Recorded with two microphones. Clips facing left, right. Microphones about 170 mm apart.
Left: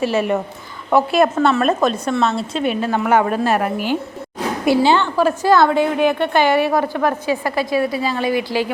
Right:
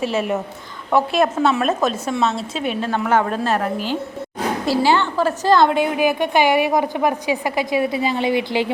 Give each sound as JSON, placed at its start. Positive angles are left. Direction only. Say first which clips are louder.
{"t": 0.0, "sound": "a woman's voice", "louder": "left 3 dB", "side_deg": 0}
{"t": 5.6, "sound": "a woman's voice", "louder": "left 2 dB", "side_deg": 0}